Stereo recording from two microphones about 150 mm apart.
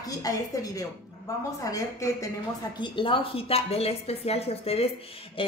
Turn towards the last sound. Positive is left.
turn(degrees=35)  # may be behind; listen again after turning